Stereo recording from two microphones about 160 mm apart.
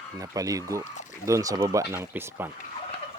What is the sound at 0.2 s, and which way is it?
Speech, 20° right (ahead or behind).